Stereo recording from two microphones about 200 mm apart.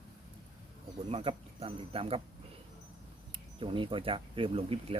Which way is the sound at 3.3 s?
25° right (ahead or behind).